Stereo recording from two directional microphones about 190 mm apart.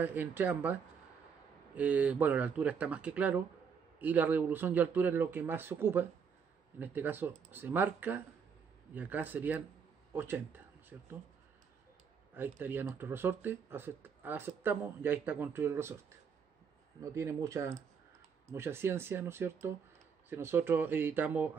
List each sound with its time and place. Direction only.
0.0 s speech: 10° right (ahead or behind)
1.8 s speech: 5° right (ahead or behind)
12.4 s speech: 10° right (ahead or behind)
17.0 s speech: 15° right (ahead or behind)